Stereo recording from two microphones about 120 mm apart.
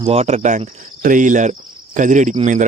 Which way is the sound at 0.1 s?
65° right (ahead or behind).